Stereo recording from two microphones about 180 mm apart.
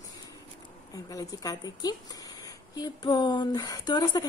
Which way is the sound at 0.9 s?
20° left (ahead or behind).